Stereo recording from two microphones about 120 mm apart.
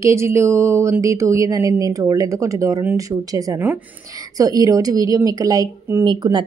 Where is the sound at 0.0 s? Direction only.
25° right (ahead or behind).